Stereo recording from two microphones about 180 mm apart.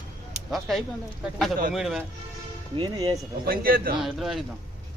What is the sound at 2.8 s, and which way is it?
Speech, 25° right (ahead or behind).